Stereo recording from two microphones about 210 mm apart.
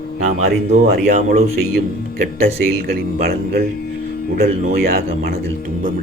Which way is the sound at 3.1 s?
45° right (ahead or behind).